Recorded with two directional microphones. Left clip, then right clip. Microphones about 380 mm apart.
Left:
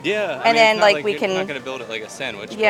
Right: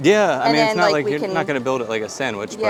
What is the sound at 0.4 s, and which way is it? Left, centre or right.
Speech, centre.